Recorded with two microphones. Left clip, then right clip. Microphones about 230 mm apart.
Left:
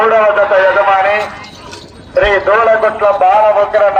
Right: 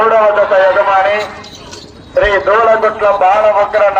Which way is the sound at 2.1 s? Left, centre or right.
Centre.